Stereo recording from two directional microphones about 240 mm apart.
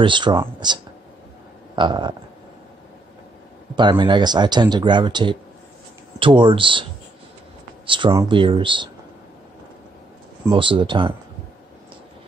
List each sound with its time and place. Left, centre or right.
0.0 s speech: centre
1.8 s speech: centre
3.7 s speech: centre
10.4 s speech: right